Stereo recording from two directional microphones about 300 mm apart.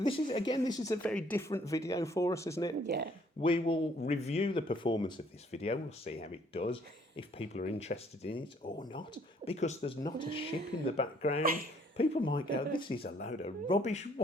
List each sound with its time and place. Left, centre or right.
0.0 s speech: centre
2.8 s speech: right
3.4 s speech: centre
13.0 s speech: left